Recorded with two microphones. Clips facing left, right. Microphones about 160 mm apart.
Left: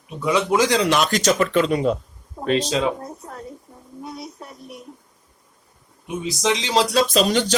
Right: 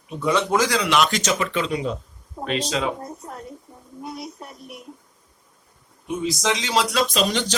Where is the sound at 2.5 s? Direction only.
30° left (ahead or behind).